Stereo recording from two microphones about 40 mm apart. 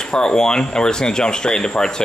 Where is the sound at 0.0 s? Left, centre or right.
Centre.